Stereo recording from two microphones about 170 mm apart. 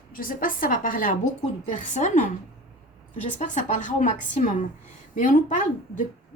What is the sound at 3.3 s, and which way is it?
A woman's voice, 45° left (ahead or behind).